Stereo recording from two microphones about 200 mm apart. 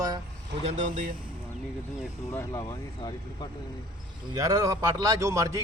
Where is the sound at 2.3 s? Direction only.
15° left (ahead or behind).